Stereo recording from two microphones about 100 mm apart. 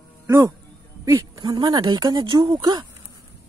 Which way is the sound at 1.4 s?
45° right (ahead or behind).